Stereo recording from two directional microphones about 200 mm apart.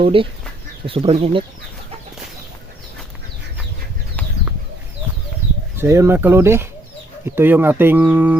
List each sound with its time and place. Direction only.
0.0 s speech: 25° right (ahead or behind)
5.7 s speech: 15° right (ahead or behind)